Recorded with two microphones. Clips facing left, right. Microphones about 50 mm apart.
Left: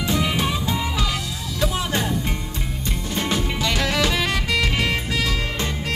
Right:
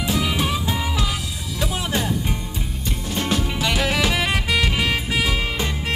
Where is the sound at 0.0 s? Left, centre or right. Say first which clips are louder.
Even; centre.